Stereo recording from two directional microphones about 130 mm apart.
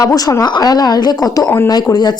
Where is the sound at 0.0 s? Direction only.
30° left (ahead or behind).